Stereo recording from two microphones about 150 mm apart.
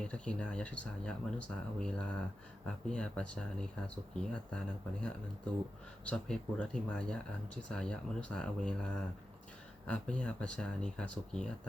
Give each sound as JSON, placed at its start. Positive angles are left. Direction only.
{"t": 0.0, "sound": "speech", "side_deg": 5}